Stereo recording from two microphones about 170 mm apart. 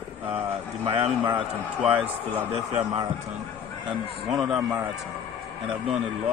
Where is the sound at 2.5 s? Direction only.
35° right (ahead or behind).